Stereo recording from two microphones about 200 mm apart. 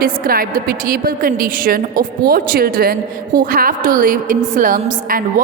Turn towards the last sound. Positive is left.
turn(degrees=-45)  # may be behind; listen again after turning